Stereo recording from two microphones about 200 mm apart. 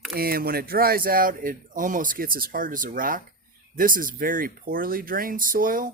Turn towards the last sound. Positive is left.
turn(degrees=-45)  # may be behind; listen again after turning